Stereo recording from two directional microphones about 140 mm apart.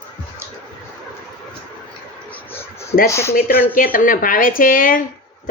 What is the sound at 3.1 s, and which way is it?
Speech, 20° left (ahead or behind).